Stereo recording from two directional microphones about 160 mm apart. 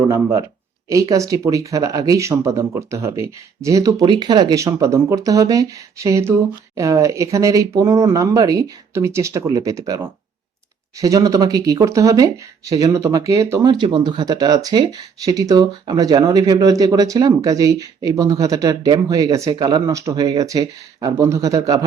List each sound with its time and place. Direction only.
0.1 s speech: 15° right (ahead or behind)